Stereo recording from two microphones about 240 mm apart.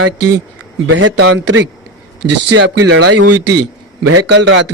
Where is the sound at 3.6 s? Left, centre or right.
Right.